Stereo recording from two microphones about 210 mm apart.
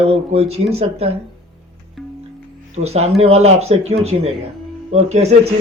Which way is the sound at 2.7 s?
30° right (ahead or behind).